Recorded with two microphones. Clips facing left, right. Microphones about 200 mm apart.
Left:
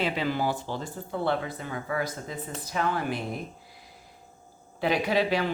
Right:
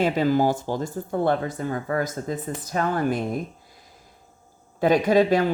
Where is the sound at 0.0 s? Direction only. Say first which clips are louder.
Right 7 dB; 45° right (ahead or behind).